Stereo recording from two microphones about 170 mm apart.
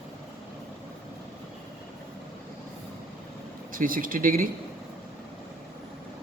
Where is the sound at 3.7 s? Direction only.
55° right (ahead or behind).